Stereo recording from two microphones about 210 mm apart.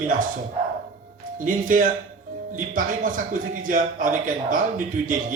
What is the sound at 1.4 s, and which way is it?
Speech, 40° right (ahead or behind).